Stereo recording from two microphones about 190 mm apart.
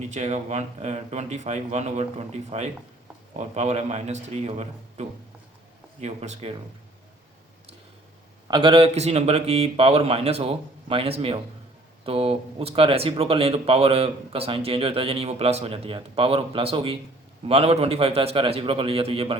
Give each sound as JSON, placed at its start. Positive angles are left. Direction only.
{"t": 0.1, "sound": "a man's voice", "side_deg": -35}
{"t": 8.4, "sound": "a man's voice", "side_deg": -25}